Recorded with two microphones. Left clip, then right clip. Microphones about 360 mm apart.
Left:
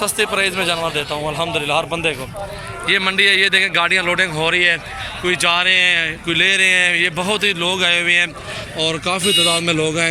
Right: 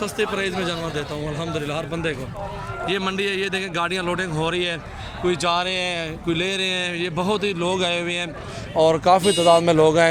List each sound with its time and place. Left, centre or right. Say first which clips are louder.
0.0 s a man's voice: left 6 dB; centre
2.8 s speech: left 9 dB; centre
8.8 s speech: right 3 dB; right